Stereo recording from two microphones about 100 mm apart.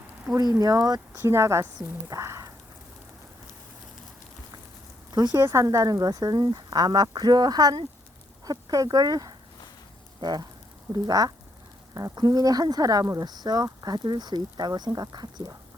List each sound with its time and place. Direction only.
0.6 s speech: 40° right (ahead or behind)
1.2 s speech: 25° right (ahead or behind)
5.1 s speech: 45° right (ahead or behind)
5.4 s speech: 30° right (ahead or behind)